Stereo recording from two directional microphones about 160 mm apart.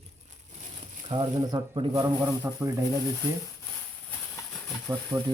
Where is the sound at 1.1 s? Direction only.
25° right (ahead or behind).